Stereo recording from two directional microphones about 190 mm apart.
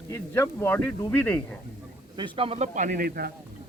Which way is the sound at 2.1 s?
25° right (ahead or behind).